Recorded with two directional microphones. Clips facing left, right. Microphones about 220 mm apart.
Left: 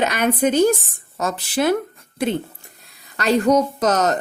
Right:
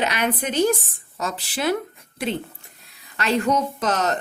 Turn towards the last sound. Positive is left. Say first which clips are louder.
# left 5 dB
turn(degrees=40)  # may be behind; listen again after turning